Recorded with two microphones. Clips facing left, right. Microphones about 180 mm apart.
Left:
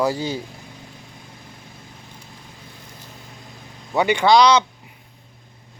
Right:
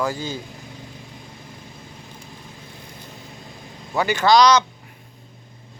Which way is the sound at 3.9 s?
20° left (ahead or behind).